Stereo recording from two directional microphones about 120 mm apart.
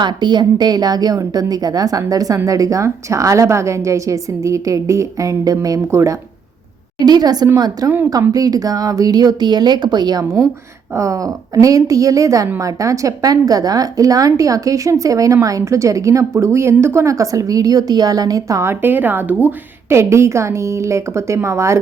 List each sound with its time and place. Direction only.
0.0 s a woman's voice: 40° right (ahead or behind)